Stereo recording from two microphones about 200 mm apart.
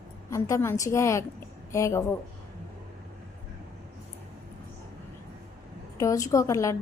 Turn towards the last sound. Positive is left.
turn(degrees=15)  # may be behind; listen again after turning